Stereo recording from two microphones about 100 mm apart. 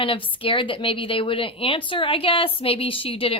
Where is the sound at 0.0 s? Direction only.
60° left (ahead or behind).